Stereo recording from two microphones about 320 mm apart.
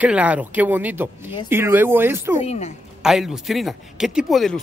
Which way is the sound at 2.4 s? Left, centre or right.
Left.